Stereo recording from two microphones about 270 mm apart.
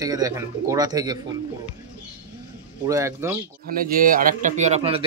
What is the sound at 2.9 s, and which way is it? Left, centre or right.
Speech, centre.